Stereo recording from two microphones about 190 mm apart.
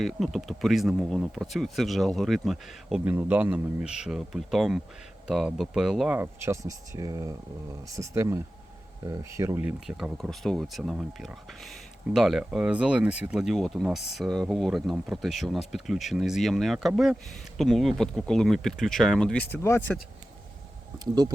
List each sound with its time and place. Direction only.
0.0 s speech: centre (ahead or behind)
6.1 s speech: 15° right (ahead or behind); by 20.0 s 10° left (ahead or behind)
21.0 s speech: 20° right (ahead or behind)